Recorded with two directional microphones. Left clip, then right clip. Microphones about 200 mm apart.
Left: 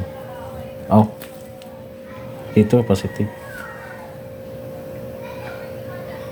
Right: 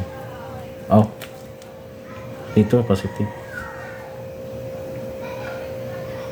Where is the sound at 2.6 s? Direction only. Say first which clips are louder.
Left 2 dB; 10° left (ahead or behind).